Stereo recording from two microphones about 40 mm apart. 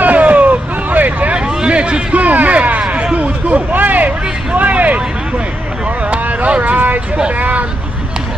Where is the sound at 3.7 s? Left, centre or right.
Right.